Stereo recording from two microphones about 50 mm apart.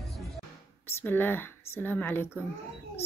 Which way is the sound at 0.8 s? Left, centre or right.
Left.